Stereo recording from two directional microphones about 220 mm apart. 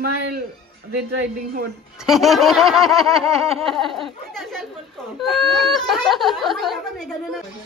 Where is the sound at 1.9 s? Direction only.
Centre (ahead or behind).